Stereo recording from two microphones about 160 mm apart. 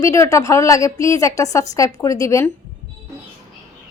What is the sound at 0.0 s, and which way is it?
A woman's voice, 20° left (ahead or behind).